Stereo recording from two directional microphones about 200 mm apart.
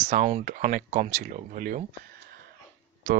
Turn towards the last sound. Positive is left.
turn(degrees=-40)  # may be behind; listen again after turning